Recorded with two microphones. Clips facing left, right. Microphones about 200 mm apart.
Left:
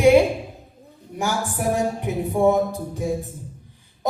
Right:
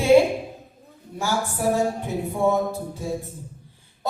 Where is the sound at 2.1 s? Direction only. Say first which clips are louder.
Left 3 dB; 15° left (ahead or behind).